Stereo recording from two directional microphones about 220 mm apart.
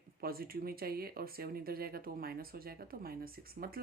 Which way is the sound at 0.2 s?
45° right (ahead or behind).